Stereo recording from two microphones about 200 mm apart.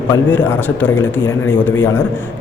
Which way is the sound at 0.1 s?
10° left (ahead or behind).